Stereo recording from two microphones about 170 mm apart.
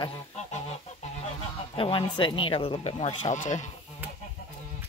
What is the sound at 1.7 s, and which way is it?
Speech, 30° left (ahead or behind).